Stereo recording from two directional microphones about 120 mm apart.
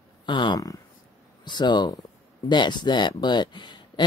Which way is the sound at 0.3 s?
40° left (ahead or behind).